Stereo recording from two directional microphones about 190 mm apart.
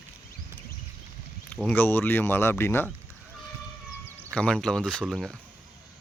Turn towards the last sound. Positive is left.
turn(degrees=0)  # may be behind; listen again after turning